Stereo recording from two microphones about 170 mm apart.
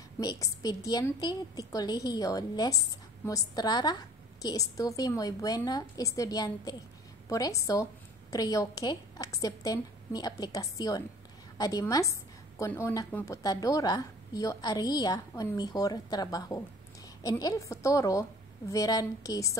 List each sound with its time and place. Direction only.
0.2 s a woman's voice: 20° left (ahead or behind)